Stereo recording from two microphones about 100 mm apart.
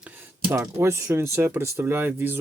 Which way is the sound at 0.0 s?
15° right (ahead or behind).